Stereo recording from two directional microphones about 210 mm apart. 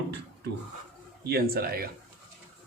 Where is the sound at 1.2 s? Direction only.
45° right (ahead or behind).